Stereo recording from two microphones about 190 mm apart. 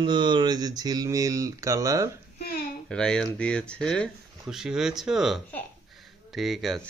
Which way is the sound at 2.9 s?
5° left (ahead or behind).